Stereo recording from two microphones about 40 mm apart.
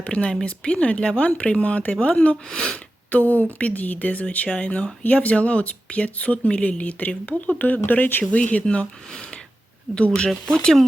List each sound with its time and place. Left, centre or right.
0.0 s speech: left
2.5 s speech: left
3.1 s speech: left
4.4 s speech: left
8.3 s speech: left
9.1 s a sound: left
9.9 s speech: left